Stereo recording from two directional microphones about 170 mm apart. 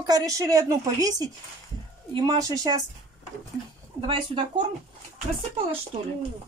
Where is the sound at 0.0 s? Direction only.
20° right (ahead or behind).